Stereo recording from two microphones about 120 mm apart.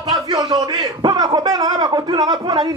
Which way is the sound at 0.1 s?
35° right (ahead or behind).